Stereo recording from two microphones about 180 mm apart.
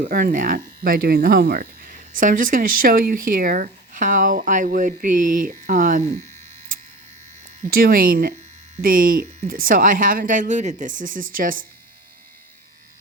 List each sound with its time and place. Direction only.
0.0 s speech: 55° right (ahead or behind)
7.7 s speech: 55° right (ahead or behind)